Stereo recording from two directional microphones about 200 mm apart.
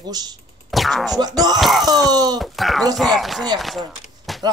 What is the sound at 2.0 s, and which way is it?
Speech, 20° right (ahead or behind).